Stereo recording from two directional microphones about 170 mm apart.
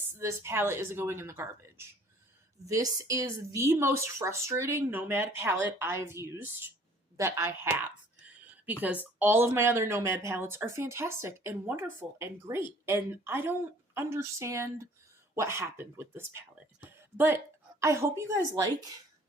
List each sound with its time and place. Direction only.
0.2 s a woman's voice: 15° right (ahead or behind)